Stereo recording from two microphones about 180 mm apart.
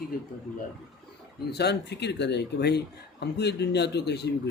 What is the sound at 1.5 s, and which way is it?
A man's voice, 65° left (ahead or behind).